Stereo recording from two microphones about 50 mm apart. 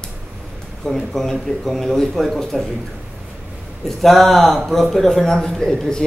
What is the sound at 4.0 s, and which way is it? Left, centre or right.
A man's voice, centre.